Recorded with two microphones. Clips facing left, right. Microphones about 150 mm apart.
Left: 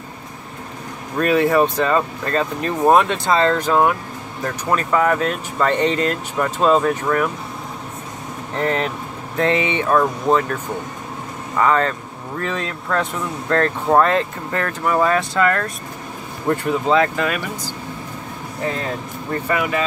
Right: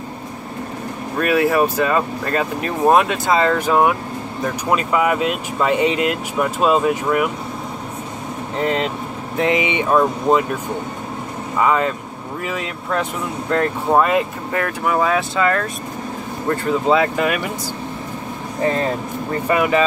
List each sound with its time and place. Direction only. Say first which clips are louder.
1.2 s speech: left 1 dB; 5° right (ahead or behind)
8.5 s speech: right 1 dB; 15° right (ahead or behind)
11.6 s speech: even; 10° right (ahead or behind)
16.8 s speech: right 1 dB; 10° right (ahead or behind)
19.4 s speech: right 5 dB; 20° right (ahead or behind)